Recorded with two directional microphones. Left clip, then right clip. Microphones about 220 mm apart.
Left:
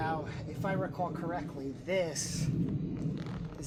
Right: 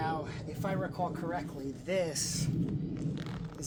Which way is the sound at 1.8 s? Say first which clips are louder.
Even; 25° right (ahead or behind).